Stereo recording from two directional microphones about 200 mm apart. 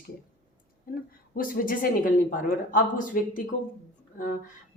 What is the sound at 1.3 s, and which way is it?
A woman's voice, 45° left (ahead or behind).